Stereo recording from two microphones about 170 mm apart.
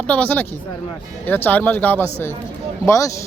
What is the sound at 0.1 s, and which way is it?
Speech, 10° left (ahead or behind).